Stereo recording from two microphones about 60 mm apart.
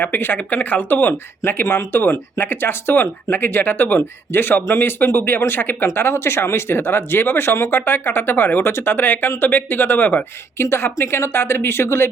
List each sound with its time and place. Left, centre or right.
0.0 s speech: left
5.9 s speech: left